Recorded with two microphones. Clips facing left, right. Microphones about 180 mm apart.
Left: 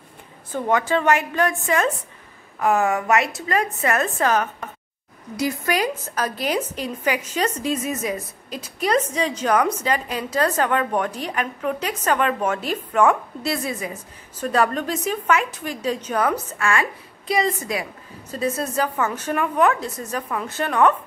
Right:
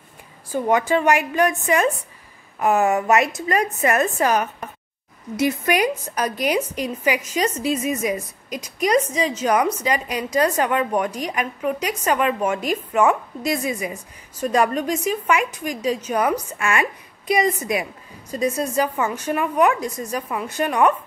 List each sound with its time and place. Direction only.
0.5 s a woman's voice: 15° right (ahead or behind)